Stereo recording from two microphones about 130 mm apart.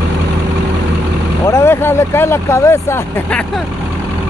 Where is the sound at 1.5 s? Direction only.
20° left (ahead or behind).